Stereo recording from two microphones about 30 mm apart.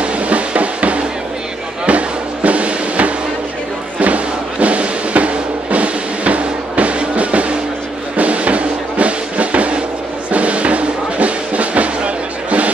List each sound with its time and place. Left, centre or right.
0.0 s music: right